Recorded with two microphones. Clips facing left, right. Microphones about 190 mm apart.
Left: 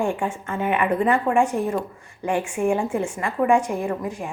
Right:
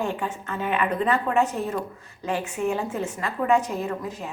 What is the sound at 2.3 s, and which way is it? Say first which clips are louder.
Speech: left 4 dB; 50° left (ahead or behind).